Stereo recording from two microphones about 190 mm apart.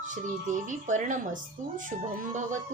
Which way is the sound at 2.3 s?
40° right (ahead or behind).